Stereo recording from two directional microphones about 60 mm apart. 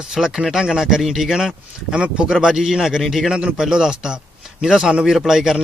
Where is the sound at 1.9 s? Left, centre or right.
Centre.